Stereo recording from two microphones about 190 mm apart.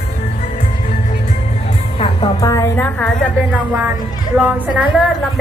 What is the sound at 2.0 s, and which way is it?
A woman's voice, 20° left (ahead or behind).